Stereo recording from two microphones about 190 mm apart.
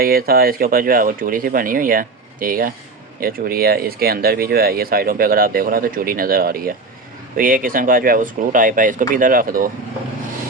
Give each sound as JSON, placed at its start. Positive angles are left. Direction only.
{"t": 0.0, "sound": "speech", "side_deg": -55}